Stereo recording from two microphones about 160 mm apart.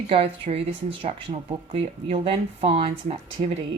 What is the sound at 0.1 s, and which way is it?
A woman's voice, 35° right (ahead or behind).